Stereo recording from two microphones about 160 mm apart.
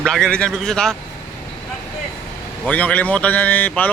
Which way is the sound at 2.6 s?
10° left (ahead or behind).